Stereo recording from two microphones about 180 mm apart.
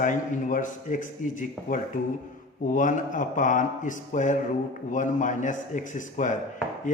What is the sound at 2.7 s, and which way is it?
A man's voice, 45° left (ahead or behind).